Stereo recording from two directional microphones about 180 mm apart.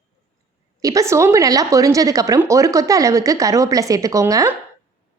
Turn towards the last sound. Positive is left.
turn(degrees=-20)  # may be behind; listen again after turning